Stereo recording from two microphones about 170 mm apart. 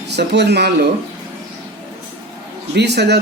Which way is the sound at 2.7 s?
80° right.